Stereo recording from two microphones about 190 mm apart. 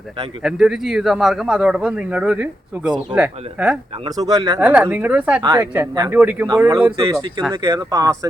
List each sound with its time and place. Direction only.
0.4 s a man's voice: 5° right (ahead or behind)
4.0 s speech: 20° right (ahead or behind)
4.6 s speech: 5° right (ahead or behind)
5.4 s speech: 20° right (ahead or behind)
6.1 s speech: 10° right (ahead or behind)